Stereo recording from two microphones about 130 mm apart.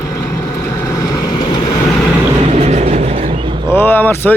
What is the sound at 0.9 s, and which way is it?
Vehicle, 30° left (ahead or behind).